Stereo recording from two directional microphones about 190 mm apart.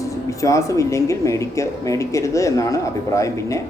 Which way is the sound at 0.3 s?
15° left (ahead or behind).